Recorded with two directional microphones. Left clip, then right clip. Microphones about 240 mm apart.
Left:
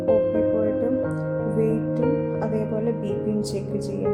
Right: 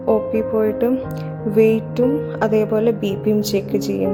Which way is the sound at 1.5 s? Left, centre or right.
Right.